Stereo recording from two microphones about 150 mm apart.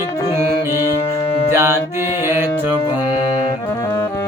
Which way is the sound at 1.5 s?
15° right (ahead or behind).